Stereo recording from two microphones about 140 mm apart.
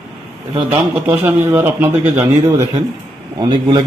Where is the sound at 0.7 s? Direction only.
15° right (ahead or behind).